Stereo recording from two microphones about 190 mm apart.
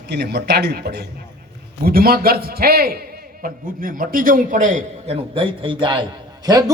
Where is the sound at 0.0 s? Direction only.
60° right (ahead or behind).